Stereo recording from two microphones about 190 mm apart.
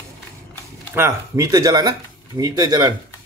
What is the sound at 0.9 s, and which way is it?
Speech, 15° right (ahead or behind).